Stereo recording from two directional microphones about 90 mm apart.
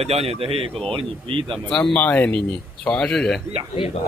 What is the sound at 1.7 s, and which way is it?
Speech, 10° left (ahead or behind).